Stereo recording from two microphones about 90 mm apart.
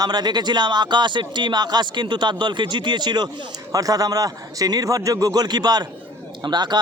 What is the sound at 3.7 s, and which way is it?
A man's voice, 40° right (ahead or behind).